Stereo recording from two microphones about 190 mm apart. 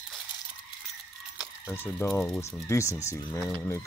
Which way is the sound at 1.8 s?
10° left (ahead or behind).